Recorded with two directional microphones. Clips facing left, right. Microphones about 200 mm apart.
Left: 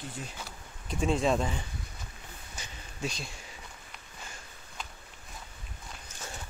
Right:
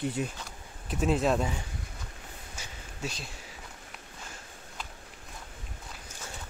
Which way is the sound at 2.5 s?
5° right (ahead or behind).